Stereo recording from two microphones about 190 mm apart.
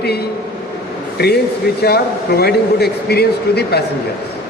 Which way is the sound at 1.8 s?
55° left (ahead or behind).